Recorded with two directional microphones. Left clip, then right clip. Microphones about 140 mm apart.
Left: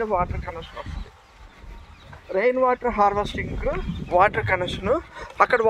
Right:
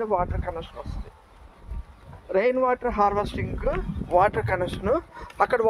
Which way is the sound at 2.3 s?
80° left.